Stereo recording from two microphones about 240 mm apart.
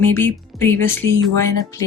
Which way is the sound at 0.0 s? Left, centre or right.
Centre.